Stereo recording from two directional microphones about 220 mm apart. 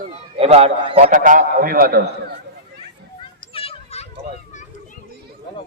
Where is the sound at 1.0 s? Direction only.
40° right (ahead or behind).